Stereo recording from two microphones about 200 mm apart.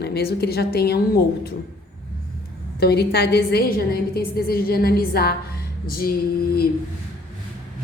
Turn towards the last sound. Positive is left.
turn(degrees=50)  # may be behind; listen again after turning